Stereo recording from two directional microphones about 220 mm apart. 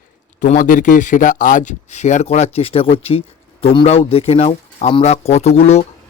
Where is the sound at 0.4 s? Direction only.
35° left (ahead or behind).